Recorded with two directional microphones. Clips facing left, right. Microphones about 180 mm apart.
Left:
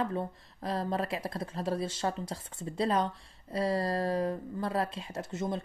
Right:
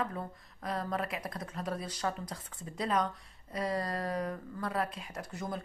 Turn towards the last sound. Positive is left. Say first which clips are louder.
# left 5 dB
turn(degrees=25)  # may be behind; listen again after turning